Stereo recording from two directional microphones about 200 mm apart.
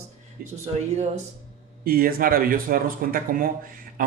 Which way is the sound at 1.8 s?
45° right (ahead or behind).